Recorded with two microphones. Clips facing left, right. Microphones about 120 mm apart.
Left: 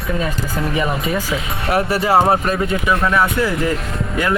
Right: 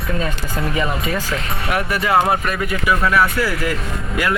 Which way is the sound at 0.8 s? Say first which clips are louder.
Left 2 dB; 15° left (ahead or behind).